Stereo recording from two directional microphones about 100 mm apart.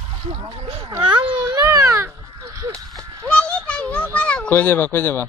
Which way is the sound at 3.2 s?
10° left (ahead or behind).